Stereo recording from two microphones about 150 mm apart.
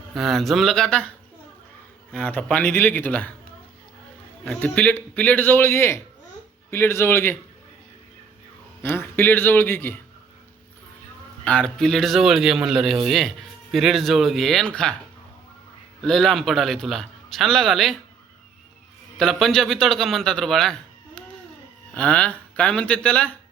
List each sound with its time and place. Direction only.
0.1 s a man's voice: centre (ahead or behind)
2.1 s a man's voice: 10° left (ahead or behind)
4.4 s a man's voice: 10° left (ahead or behind)
8.8 s a man's voice: 15° left (ahead or behind)
11.4 s a man's voice: 5° left (ahead or behind)
16.0 s a man's voice: 5° left (ahead or behind)
19.1 s a man's voice: 5° left (ahead or behind)
21.9 s a man's voice: 5° left (ahead or behind)